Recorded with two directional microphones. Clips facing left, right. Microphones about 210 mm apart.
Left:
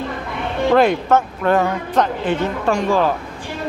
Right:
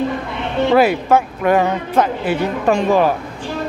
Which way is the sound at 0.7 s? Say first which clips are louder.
Right 1 dB; 10° right (ahead or behind).